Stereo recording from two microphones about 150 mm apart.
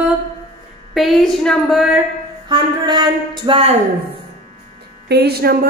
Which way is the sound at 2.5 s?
30° right (ahead or behind).